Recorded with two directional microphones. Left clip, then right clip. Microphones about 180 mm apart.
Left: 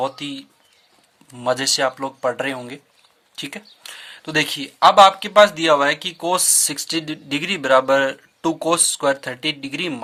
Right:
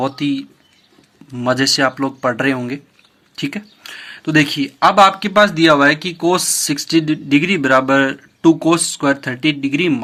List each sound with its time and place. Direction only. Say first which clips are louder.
1.3 s speech: right 4 dB; 30° left (ahead or behind)